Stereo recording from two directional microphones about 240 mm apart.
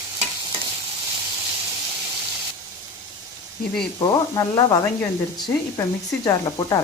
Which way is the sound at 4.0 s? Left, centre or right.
Centre.